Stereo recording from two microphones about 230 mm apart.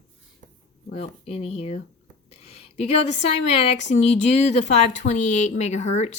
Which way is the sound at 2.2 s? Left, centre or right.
Left.